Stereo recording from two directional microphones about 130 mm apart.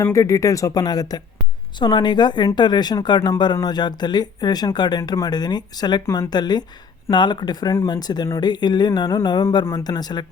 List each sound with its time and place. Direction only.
0.0 s speech: 25° left (ahead or behind)